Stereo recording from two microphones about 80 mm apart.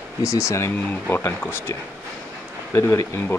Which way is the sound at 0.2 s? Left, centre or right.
Left.